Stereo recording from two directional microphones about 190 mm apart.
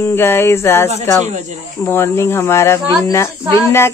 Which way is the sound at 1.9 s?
15° left (ahead or behind).